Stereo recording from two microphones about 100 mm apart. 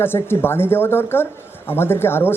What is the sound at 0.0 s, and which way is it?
A woman's voice, 20° left (ahead or behind).